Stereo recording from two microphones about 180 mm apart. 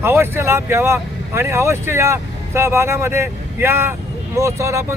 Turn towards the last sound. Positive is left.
turn(degrees=-15)  # may be behind; listen again after turning